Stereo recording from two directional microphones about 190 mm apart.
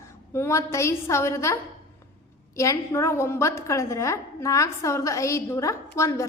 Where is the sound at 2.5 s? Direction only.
15° left (ahead or behind).